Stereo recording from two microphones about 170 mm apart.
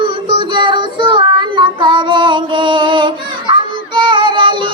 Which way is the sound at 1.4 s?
30° right (ahead or behind).